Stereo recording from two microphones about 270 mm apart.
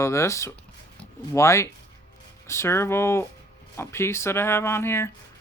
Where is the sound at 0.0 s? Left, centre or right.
Centre.